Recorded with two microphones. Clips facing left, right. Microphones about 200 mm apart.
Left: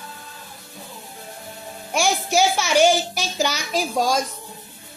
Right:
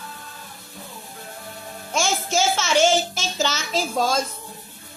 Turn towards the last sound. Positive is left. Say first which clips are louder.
# left 1 dB
turn(degrees=15)  # may be behind; listen again after turning